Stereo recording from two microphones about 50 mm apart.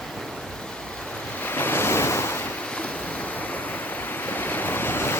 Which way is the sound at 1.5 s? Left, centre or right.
Left.